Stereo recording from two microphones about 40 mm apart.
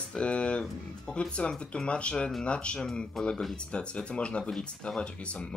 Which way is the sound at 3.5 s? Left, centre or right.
Left.